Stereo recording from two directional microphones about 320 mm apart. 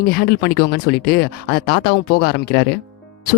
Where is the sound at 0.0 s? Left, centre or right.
Left.